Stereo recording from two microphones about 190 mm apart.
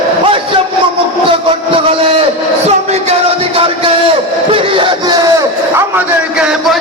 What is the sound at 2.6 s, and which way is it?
Music, 35° right (ahead or behind).